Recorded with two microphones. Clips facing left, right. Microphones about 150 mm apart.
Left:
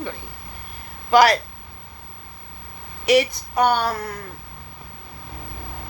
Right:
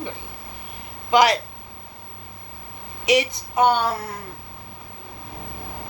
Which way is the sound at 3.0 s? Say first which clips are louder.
Left 3 dB; 20° right (ahead or behind).